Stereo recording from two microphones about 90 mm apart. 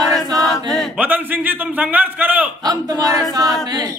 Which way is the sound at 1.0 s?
20° right (ahead or behind).